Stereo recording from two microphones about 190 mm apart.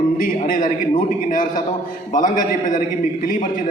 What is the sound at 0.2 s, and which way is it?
A man's voice, 45° left (ahead or behind).